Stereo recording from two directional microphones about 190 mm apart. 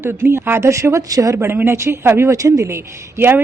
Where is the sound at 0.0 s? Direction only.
10° right (ahead or behind).